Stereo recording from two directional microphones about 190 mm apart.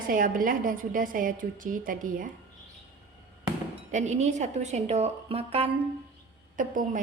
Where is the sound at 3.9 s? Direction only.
40° right (ahead or behind).